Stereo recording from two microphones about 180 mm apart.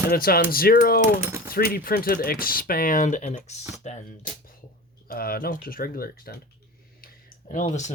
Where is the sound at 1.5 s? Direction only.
55° left (ahead or behind); by 4.3 s 40° left (ahead or behind).